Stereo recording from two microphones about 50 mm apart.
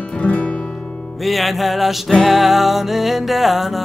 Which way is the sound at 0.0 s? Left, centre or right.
Left.